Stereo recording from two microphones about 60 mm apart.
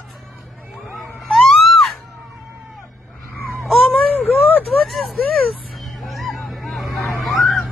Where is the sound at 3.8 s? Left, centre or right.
Left.